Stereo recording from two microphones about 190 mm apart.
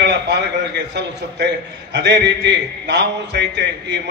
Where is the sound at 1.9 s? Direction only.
65° right (ahead or behind).